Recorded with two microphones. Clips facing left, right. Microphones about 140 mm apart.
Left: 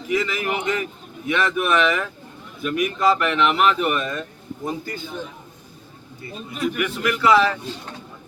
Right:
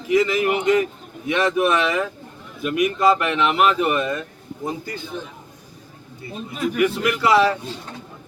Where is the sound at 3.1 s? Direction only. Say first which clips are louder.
Even; 20° right (ahead or behind).